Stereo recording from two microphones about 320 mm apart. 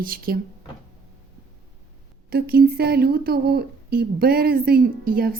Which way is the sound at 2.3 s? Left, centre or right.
Right.